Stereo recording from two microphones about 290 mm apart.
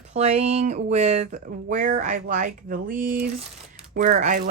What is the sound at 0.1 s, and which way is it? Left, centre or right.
Speech, right.